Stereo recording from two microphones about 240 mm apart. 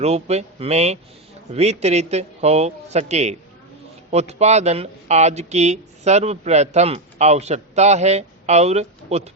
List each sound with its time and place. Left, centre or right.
0.0 s a man's voice: right